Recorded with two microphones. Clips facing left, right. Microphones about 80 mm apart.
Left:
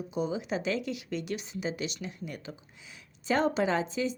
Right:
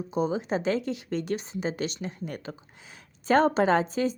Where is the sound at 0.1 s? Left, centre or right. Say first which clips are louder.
Right 5 dB; right.